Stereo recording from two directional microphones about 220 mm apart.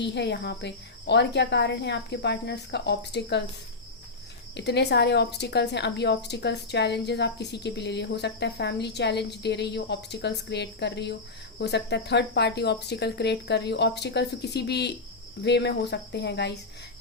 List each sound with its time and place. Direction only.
0.0 s speech: 50° left (ahead or behind)
4.5 s speech: 50° left (ahead or behind)